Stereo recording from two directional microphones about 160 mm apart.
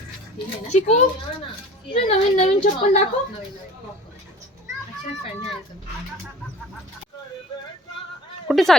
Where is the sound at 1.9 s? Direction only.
45° left (ahead or behind).